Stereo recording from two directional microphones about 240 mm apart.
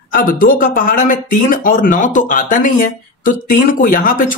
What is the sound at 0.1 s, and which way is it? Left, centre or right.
Speech, left.